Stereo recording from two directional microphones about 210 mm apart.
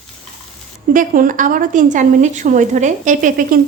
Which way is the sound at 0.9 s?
40° right (ahead or behind).